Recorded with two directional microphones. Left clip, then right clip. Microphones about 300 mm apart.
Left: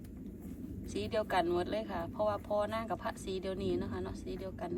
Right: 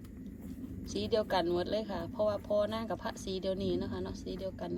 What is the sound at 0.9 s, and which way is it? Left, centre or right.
A woman's voice, centre.